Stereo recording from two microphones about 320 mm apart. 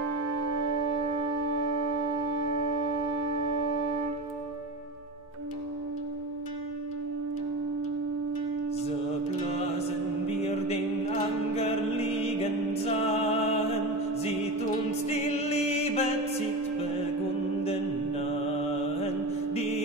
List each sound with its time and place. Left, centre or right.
1.5 s wind instrument: right
3.3 s music: right
9.5 s chant: centre
12.2 s music: centre
14.9 s music: centre
19.5 s mantra: centre